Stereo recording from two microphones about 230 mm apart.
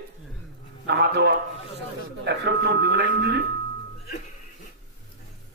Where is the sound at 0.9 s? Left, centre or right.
Right.